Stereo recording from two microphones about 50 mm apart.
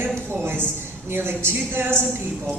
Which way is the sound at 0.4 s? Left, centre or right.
Right.